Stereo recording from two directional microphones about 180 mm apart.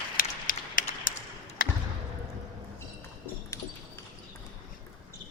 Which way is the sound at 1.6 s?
50° left (ahead or behind).